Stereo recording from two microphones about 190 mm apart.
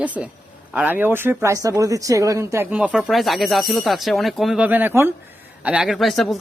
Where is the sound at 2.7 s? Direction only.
5° right (ahead or behind).